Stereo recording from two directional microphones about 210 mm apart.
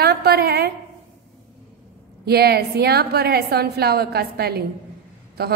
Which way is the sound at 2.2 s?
50° right (ahead or behind).